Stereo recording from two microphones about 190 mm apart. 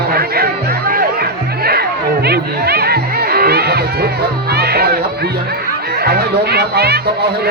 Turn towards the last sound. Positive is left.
turn(degrees=-55)  # may be behind; listen again after turning